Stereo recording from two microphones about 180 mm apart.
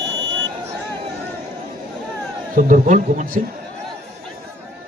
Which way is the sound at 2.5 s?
45° right (ahead or behind).